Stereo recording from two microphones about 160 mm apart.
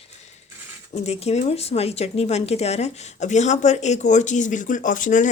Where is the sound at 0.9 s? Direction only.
40° left (ahead or behind).